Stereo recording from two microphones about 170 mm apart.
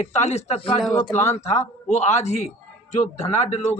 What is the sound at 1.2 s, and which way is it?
A man's voice, 40° left (ahead or behind).